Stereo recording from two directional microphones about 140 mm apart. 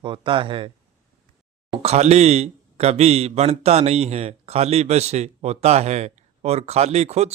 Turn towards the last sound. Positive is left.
turn(degrees=-50)  # may be behind; listen again after turning